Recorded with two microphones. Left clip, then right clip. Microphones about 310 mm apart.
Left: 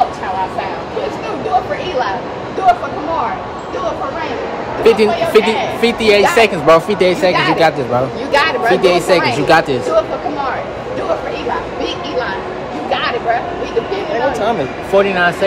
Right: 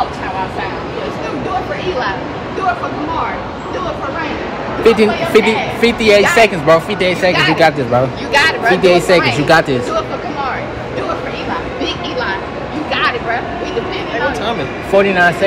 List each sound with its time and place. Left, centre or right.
4.8 s speech: centre
8.3 s a sound: left
8.8 s speech: centre
15.0 s speech: centre